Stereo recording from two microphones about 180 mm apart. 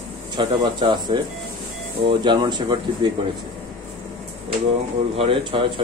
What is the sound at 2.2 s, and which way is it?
Speech, 25° right (ahead or behind).